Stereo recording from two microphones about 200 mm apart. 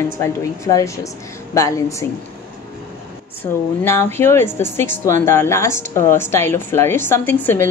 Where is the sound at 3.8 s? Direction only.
10° left (ahead or behind).